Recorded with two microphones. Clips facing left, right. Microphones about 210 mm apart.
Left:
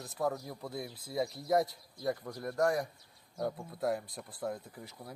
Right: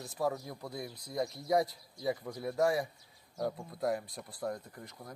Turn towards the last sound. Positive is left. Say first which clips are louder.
# left 1 dB
turn(degrees=5)  # may be behind; listen again after turning